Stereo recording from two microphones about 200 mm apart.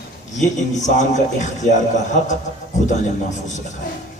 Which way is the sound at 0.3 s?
35° left (ahead or behind).